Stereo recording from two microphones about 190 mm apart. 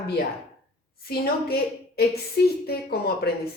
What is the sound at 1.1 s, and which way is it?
A woman's voice, 55° left (ahead or behind).